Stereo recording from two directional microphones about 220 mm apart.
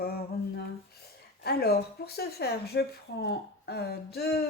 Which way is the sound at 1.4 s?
45° left (ahead or behind).